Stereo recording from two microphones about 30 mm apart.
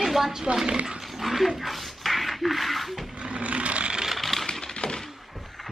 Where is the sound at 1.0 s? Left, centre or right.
Centre.